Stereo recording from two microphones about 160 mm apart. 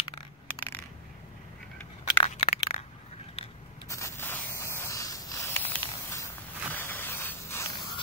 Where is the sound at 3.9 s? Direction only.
15° left (ahead or behind).